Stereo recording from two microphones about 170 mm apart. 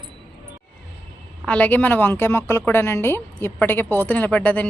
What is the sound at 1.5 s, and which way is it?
Speech, 10° left (ahead or behind).